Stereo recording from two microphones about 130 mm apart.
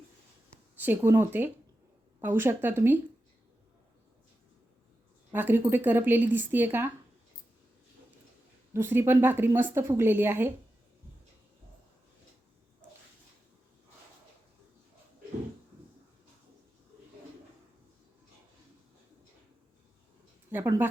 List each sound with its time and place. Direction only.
0.8 s speech: 15° right (ahead or behind)
5.3 s speech: 15° right (ahead or behind)
8.7 s speech: 15° right (ahead or behind)
20.5 s speech: 15° right (ahead or behind)